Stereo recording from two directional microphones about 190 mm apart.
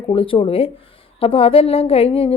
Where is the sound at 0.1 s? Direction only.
30° left (ahead or behind).